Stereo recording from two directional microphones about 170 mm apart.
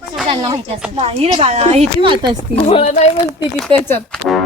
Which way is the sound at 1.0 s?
35° right (ahead or behind).